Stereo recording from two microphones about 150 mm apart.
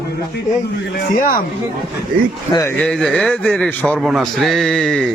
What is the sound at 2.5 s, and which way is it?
Speech, 20° left (ahead or behind).